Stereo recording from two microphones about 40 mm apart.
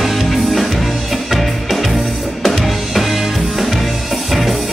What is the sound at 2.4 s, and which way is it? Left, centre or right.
Music, centre.